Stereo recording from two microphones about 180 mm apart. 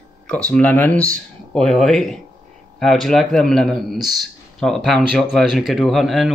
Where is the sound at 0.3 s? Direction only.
5° left (ahead or behind).